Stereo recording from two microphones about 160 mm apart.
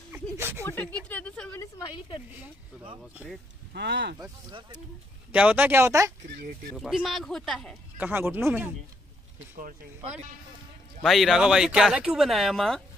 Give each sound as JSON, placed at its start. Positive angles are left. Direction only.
{"t": 0.1, "sound": "a sound", "side_deg": -15}
{"t": 0.7, "sound": "a sound", "side_deg": 10}
{"t": 1.6, "sound": "a sound", "side_deg": 30}
{"t": 3.7, "sound": "speech", "side_deg": -90}
{"t": 4.2, "sound": "speech", "side_deg": -30}
{"t": 5.3, "sound": "speech", "side_deg": -10}
{"t": 6.3, "sound": "speech", "side_deg": -70}
{"t": 6.8, "sound": "speech", "side_deg": 0}
{"t": 8.0, "sound": "speech", "side_deg": -10}
{"t": 9.6, "sound": "speech", "side_deg": -60}
{"t": 11.0, "sound": "speech", "side_deg": 0}